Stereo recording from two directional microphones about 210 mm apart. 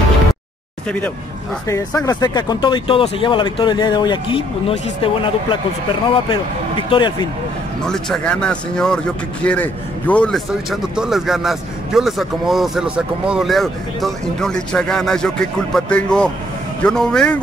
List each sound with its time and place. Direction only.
0.8 s speech: 5° left (ahead or behind); by 5.6 s 25° left (ahead or behind)
6.9 s speech: 20° left (ahead or behind)
7.8 s speech: 5° left (ahead or behind)